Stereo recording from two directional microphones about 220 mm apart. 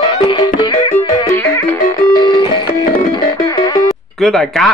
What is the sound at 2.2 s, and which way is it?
Music, 20° left (ahead or behind).